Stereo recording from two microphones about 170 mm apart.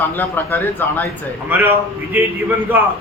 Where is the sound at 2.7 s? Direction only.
10° right (ahead or behind).